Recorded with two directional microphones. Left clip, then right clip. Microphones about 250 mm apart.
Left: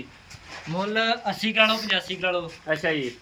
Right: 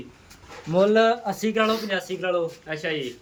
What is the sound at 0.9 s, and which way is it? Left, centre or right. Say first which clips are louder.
Speech: right 3 dB; right.